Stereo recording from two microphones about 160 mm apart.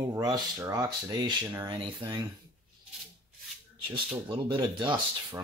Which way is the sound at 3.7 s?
30° right (ahead or behind).